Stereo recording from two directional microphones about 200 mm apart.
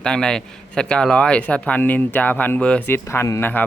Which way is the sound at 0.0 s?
5° left (ahead or behind).